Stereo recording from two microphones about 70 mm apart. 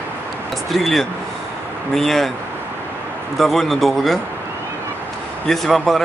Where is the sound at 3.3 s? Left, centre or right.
Centre.